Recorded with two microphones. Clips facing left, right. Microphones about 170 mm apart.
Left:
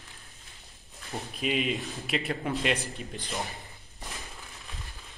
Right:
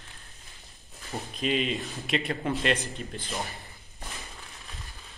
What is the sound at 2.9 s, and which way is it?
Speech, 15° left (ahead or behind).